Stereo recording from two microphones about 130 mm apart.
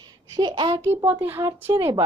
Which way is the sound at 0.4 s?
35° right (ahead or behind).